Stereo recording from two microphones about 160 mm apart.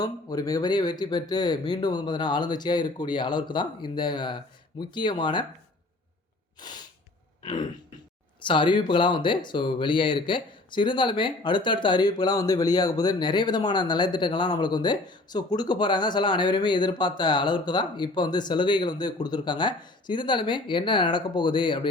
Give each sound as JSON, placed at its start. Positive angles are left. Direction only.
{"t": 0.0, "sound": "speech", "side_deg": 25}
{"t": 6.6, "sound": "sneeze", "side_deg": 25}
{"t": 7.4, "sound": "throat clearing", "side_deg": 30}
{"t": 8.4, "sound": "speech", "side_deg": 30}